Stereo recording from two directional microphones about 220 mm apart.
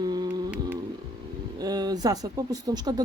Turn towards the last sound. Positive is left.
turn(degrees=-15)  # may be behind; listen again after turning